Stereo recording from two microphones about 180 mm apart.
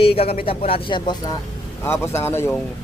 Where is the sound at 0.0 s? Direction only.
30° left (ahead or behind).